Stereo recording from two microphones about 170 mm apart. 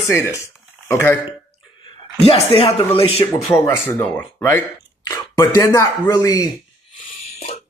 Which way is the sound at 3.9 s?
10° left (ahead or behind).